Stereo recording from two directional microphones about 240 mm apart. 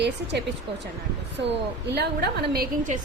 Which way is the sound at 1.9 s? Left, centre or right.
Right.